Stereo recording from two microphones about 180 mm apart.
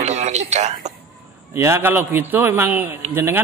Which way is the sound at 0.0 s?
40° right (ahead or behind).